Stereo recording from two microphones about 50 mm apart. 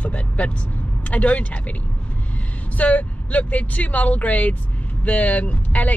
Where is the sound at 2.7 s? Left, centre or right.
Left.